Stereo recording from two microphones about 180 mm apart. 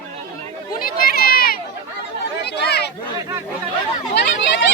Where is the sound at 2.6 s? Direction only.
65° left (ahead or behind).